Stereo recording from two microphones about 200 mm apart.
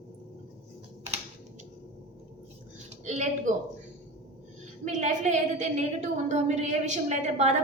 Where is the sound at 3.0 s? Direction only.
35° right (ahead or behind).